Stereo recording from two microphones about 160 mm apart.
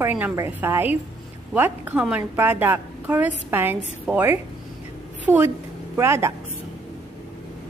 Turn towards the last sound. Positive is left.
turn(degrees=-15)  # may be behind; listen again after turning